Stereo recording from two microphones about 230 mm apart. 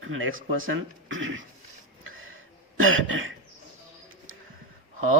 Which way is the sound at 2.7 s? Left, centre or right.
Right.